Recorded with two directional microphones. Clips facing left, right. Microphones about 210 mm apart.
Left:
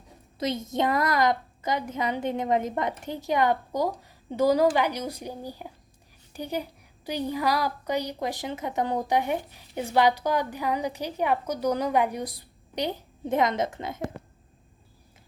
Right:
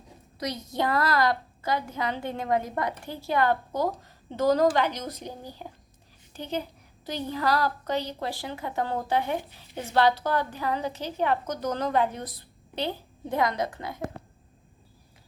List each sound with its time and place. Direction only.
0.3 s a woman's voice: 25° left (ahead or behind)